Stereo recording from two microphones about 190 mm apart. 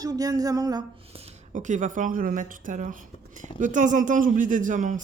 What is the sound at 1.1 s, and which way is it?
Speech, 40° right (ahead or behind).